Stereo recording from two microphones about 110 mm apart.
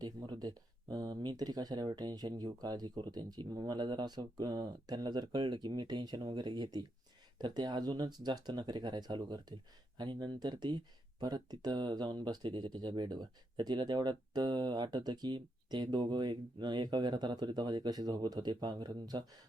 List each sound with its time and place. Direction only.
0.0 s speech: 40° right (ahead or behind)